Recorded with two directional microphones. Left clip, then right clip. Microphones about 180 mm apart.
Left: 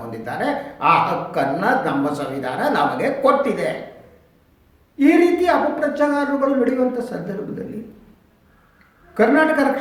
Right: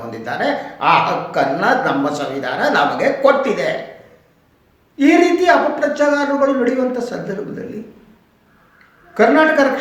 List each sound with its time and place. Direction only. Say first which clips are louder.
0.1 s speech: right 4 dB; 10° right (ahead or behind)
4.9 s speech: right 3 dB; 10° right (ahead or behind)
9.1 s speech: right 4 dB; 10° right (ahead or behind)